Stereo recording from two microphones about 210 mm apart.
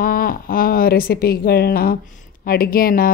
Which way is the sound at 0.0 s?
45° left (ahead or behind).